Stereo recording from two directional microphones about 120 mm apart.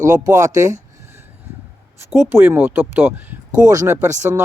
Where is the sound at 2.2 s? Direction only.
20° right (ahead or behind).